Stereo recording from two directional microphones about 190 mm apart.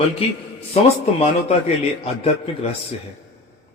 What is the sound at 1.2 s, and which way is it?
Speech, 35° left (ahead or behind).